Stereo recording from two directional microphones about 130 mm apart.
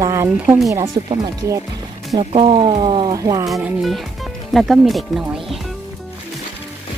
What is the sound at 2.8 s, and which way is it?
Speech, 35° right (ahead or behind).